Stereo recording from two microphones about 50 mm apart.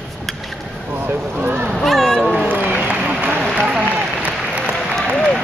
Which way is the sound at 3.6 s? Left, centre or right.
Right.